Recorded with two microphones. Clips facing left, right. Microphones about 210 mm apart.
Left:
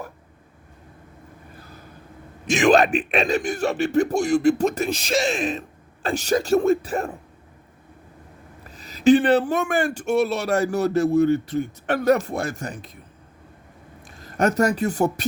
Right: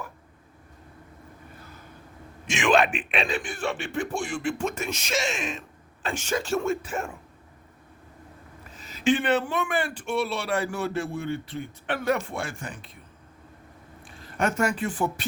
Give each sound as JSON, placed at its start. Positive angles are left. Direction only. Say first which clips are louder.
{"t": 2.5, "sound": "speech", "louder": "left 6 dB", "side_deg": 40}
{"t": 8.7, "sound": "speech", "louder": "left 8 dB", "side_deg": 35}
{"t": 14.2, "sound": "speech", "louder": "left 5 dB", "side_deg": 40}